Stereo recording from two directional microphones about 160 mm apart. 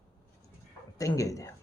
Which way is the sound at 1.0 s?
20° left (ahead or behind).